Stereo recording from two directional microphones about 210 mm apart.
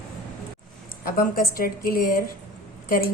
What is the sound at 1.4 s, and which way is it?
A woman's voice, 45° left (ahead or behind).